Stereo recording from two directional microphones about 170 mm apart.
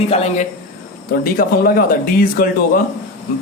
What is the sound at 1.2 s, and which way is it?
Speech, 55° left (ahead or behind).